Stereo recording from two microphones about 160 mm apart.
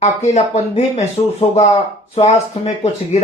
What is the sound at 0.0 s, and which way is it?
Speech, 45° left (ahead or behind).